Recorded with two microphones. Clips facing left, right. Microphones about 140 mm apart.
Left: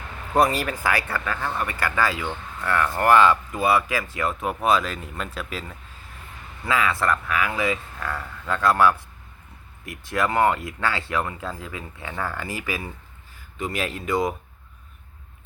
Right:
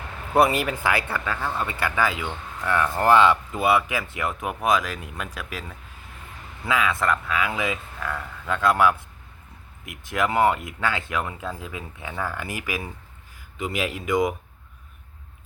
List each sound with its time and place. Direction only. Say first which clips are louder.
0.7 s speech: even; 20° right (ahead or behind)
7.9 s speech: even; centre (ahead or behind)
8.4 s speech: left 1 dB; 15° right (ahead or behind)